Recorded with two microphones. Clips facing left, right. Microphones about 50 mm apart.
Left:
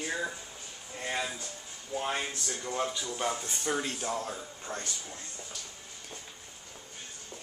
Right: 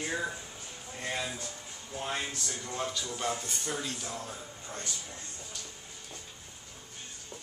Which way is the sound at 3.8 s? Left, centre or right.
Left.